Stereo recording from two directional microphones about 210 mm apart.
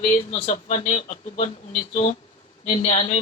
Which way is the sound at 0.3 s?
30° left (ahead or behind).